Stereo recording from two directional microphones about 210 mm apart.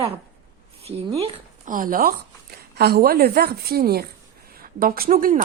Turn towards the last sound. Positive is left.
turn(degrees=-40)  # may be behind; listen again after turning